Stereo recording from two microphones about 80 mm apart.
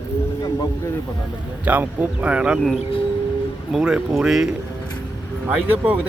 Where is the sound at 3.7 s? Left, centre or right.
Centre.